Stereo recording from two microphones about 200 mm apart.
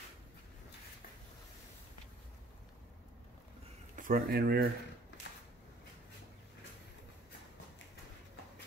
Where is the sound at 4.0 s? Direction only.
45° right (ahead or behind).